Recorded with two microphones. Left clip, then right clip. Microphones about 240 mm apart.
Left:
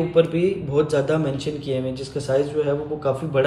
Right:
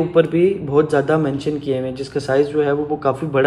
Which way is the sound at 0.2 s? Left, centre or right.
Centre.